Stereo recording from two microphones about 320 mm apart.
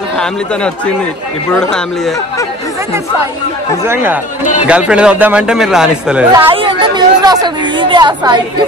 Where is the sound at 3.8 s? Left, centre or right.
Centre.